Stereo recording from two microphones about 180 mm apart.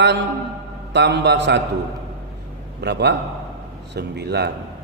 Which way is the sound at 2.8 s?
70° right (ahead or behind).